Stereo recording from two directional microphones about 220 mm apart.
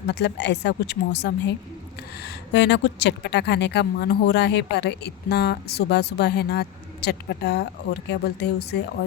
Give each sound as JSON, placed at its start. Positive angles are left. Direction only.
{"t": 0.1, "sound": "a woman's voice", "side_deg": 50}